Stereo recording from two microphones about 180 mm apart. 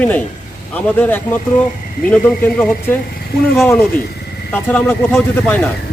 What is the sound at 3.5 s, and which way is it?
Speech, 15° left (ahead or behind).